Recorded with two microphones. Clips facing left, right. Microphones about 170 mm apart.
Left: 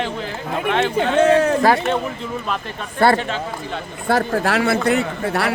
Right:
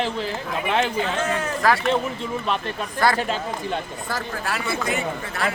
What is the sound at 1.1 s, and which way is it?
Speech, 75° left (ahead or behind).